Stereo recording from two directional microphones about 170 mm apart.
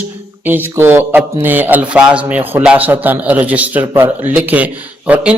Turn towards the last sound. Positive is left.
turn(degrees=-10)  # may be behind; listen again after turning